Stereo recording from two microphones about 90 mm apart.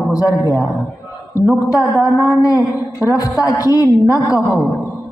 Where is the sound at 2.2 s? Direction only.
40° left (ahead or behind).